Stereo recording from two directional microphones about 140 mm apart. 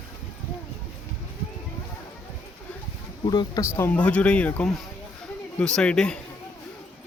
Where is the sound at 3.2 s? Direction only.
30° left (ahead or behind).